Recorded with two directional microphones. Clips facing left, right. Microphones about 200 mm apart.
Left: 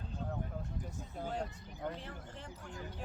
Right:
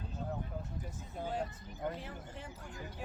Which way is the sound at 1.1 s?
5° right (ahead or behind).